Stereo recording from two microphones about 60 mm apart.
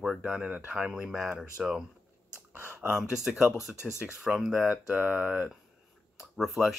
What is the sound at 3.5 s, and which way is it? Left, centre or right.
Speech, left.